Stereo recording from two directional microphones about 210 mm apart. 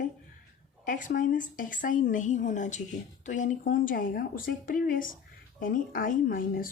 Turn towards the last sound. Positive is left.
turn(degrees=40)  # may be behind; listen again after turning